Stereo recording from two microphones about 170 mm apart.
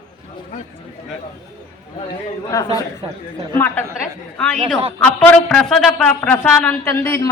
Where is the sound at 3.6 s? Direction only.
10° left (ahead or behind).